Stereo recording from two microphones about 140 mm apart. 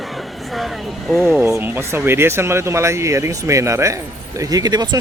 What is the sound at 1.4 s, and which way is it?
Speech, 20° right (ahead or behind).